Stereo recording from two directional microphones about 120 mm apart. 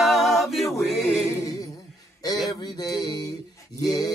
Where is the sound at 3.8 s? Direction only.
30° left (ahead or behind).